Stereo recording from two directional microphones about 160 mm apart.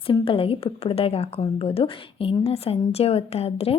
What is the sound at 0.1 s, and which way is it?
Speech, 35° left (ahead or behind).